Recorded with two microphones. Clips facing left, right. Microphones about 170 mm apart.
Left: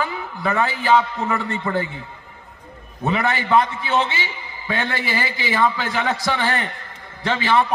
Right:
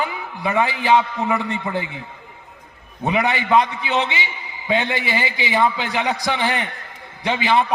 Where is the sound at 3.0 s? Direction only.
15° right (ahead or behind).